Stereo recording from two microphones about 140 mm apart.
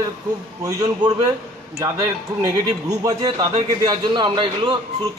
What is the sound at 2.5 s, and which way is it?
Speech, 25° right (ahead or behind).